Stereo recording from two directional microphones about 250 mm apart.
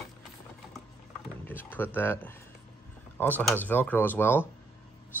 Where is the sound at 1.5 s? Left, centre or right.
Centre.